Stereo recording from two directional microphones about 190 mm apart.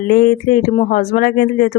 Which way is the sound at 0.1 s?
50° left (ahead or behind).